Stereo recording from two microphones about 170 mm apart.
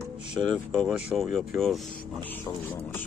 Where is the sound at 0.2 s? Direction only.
5° right (ahead or behind).